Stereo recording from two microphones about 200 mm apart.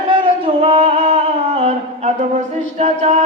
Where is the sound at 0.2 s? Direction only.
25° right (ahead or behind).